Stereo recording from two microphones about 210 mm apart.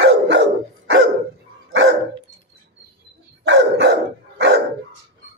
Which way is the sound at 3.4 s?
60° right (ahead or behind).